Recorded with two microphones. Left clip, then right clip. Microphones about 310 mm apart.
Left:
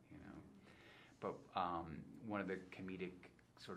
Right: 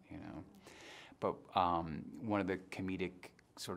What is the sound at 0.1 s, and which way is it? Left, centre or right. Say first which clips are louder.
Speech: right 9 dB; right.